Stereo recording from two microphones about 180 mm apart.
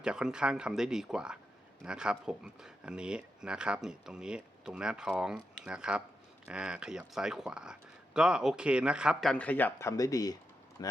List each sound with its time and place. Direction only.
0.0 s speech: 5° right (ahead or behind); by 10.9 s 20° left (ahead or behind)